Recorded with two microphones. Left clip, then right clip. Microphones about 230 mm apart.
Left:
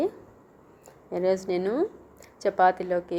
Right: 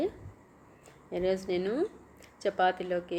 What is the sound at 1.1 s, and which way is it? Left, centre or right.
A woman's voice, centre.